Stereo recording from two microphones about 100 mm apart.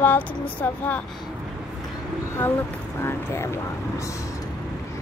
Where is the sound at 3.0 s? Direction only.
25° left (ahead or behind).